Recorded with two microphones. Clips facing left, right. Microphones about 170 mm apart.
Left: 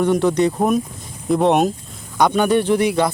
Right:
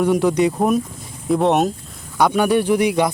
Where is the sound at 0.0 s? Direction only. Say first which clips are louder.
Even; 5° right (ahead or behind).